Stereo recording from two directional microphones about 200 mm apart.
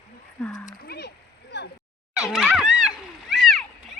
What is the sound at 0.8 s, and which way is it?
Speech, 55° left (ahead or behind).